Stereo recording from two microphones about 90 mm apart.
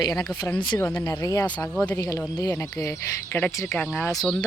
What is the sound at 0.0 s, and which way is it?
Speech, 45° left (ahead or behind).